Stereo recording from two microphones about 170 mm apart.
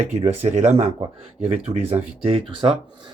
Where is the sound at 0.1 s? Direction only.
40° right (ahead or behind).